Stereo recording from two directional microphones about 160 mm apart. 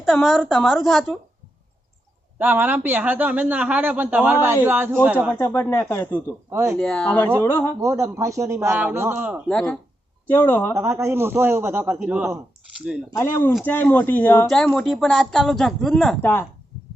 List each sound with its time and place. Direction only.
0.0 s speech: centre (ahead or behind)
2.4 s a man's voice: 10° right (ahead or behind)
5.4 s speech: 15° left (ahead or behind)
6.5 s speech: 15° right (ahead or behind)
6.7 s speech: 5° left (ahead or behind)
7.8 s a man's voice: 20° right (ahead or behind)
9.5 s speech: 5° left (ahead or behind)
10.8 s a man's voice: 15° right (ahead or behind)
13.1 s speech: 15° left (ahead or behind)
14.4 s speech: centre (ahead or behind)
16.2 s speech: 15° left (ahead or behind)